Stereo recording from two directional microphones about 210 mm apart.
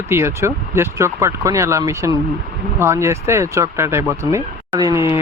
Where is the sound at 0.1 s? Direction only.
10° right (ahead or behind).